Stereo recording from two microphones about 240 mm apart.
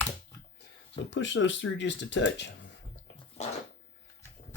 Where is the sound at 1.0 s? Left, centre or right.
Left.